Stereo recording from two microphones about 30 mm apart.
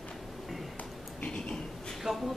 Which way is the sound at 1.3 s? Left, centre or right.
Left.